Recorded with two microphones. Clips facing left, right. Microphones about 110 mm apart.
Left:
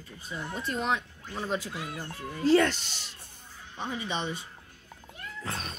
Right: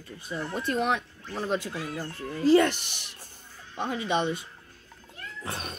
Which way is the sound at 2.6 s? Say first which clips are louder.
Right 2 dB; 15° right (ahead or behind).